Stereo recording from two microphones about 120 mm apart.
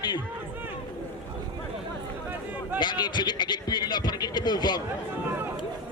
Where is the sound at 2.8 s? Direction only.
40° left (ahead or behind).